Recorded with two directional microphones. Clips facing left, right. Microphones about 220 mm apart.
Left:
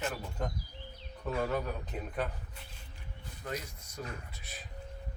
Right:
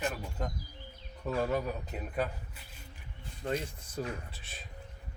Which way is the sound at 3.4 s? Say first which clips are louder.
Right 6 dB; 30° right (ahead or behind).